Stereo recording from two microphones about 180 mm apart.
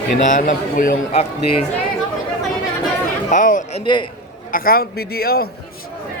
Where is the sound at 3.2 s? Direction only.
45° left (ahead or behind).